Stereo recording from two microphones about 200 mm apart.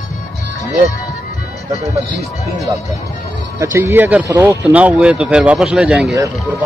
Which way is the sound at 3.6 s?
15° right (ahead or behind).